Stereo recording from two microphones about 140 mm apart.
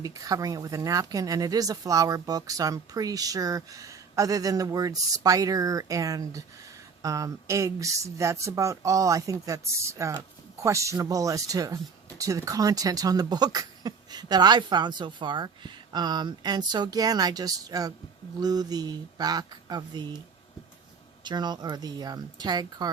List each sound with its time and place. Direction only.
0.0 s speech: 25° right (ahead or behind)
21.2 s speech: 30° right (ahead or behind)